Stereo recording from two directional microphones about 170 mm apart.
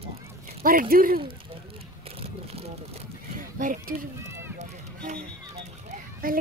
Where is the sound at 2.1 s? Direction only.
35° right (ahead or behind).